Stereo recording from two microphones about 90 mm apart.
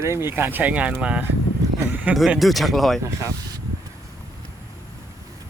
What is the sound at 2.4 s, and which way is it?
Speech, centre (ahead or behind).